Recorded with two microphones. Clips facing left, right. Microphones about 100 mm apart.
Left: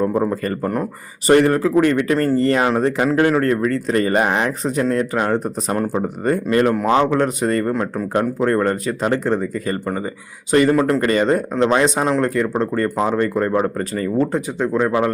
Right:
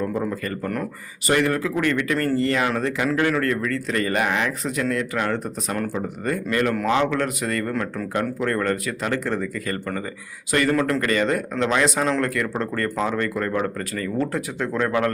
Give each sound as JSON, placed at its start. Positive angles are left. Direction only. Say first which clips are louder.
{"t": 0.0, "sound": "speech", "louder": "left 6 dB", "side_deg": 35}
{"t": 11.0, "sound": "speech", "louder": "left 5 dB", "side_deg": 30}
{"t": 12.0, "sound": "speech", "louder": "left 5 dB", "side_deg": 15}